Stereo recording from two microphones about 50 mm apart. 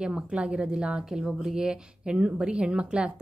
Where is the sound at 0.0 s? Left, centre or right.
Centre.